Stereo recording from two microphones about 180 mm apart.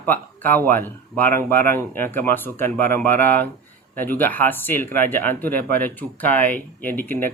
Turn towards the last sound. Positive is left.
turn(degrees=10)  # may be behind; listen again after turning